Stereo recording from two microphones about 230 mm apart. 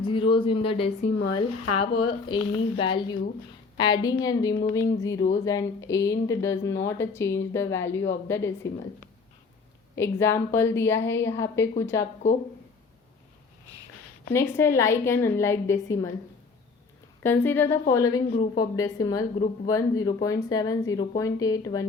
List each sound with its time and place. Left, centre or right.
0.0 s speech: left
1.3 s speech: left
2.0 s speech: left
9.9 s speech: centre
14.3 s speech: centre
17.2 s speech: centre